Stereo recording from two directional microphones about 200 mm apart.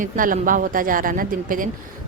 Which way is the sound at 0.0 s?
40° right (ahead or behind).